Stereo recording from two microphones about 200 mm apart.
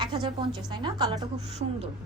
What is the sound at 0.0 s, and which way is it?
A woman's voice, 20° right (ahead or behind).